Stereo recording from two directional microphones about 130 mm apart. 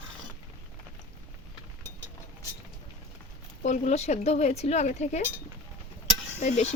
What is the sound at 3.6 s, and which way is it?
Speech, 65° left (ahead or behind).